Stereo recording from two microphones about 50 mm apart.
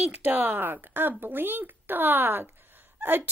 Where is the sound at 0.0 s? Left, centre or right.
Right.